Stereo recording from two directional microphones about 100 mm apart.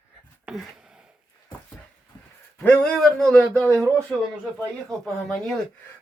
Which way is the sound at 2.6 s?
10° left (ahead or behind).